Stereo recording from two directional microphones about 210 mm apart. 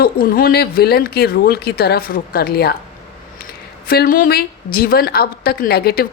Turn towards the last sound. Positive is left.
turn(degrees=45)  # may be behind; listen again after turning